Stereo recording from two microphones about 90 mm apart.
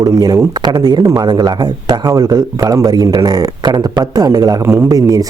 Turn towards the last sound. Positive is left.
turn(degrees=-40)  # may be behind; listen again after turning